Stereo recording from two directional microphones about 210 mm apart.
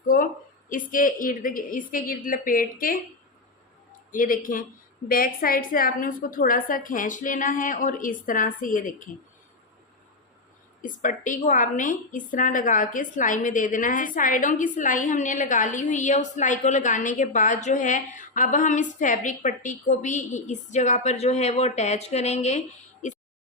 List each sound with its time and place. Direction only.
0.7 s a woman's voice: 40° left (ahead or behind)
4.1 s a woman's voice: 40° left (ahead or behind)
10.8 s a woman's voice: 40° left (ahead or behind)